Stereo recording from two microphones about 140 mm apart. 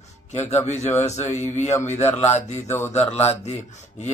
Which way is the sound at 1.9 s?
50° left (ahead or behind).